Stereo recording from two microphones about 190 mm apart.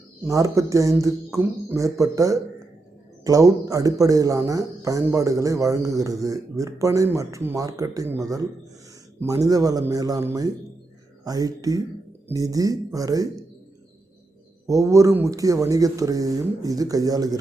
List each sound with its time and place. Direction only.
0.2 s speech: 15° right (ahead or behind)
14.7 s speech: 15° right (ahead or behind)